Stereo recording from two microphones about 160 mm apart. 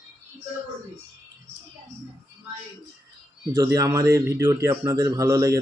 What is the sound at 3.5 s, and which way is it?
A man's voice, 20° right (ahead or behind).